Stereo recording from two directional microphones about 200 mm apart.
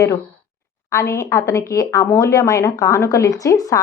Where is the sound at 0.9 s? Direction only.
15° left (ahead or behind).